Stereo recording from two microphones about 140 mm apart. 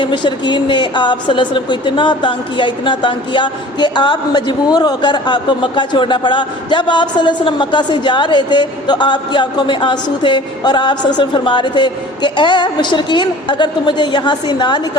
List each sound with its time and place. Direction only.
0.0 s a woman's voice: 35° left (ahead or behind)